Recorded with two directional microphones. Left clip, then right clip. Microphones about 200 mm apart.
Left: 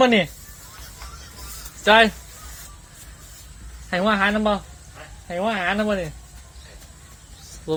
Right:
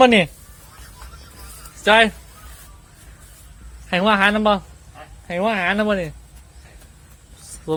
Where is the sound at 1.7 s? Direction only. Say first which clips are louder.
Right 1 dB; 20° right (ahead or behind).